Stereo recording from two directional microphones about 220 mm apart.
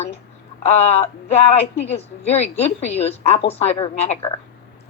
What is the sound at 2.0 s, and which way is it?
Speech, 30° left (ahead or behind).